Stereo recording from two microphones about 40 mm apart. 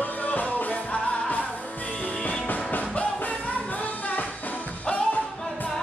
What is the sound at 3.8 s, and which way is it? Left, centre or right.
Music, left.